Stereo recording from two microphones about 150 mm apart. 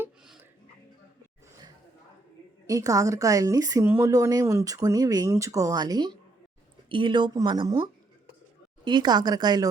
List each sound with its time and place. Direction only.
2.6 s a woman's voice: 20° right (ahead or behind)